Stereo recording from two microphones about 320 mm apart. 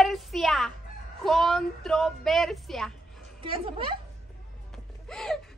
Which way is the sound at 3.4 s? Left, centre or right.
Centre.